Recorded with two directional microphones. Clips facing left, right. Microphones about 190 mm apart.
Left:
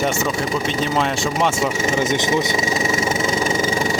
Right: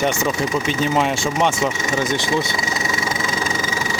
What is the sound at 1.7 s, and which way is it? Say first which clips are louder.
Vehicle: left 2 dB; 30° left (ahead or behind).